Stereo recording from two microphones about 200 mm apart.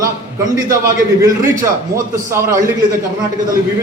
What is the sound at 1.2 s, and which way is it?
Speech, 15° right (ahead or behind).